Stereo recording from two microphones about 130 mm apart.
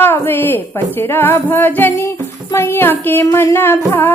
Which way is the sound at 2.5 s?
20° left (ahead or behind).